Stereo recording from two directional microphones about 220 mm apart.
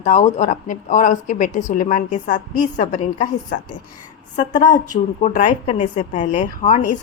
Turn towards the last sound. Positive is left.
turn(degrees=35)  # may be behind; listen again after turning